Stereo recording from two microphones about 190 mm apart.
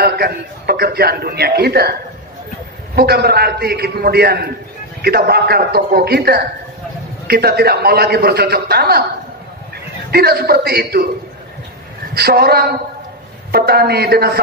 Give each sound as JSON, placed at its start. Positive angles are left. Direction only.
{"t": 0.0, "sound": "a man's voice", "side_deg": -55}
{"t": 3.0, "sound": "a man's voice", "side_deg": -55}
{"t": 10.1, "sound": "a man's voice", "side_deg": -55}
{"t": 12.1, "sound": "a man's voice", "side_deg": -55}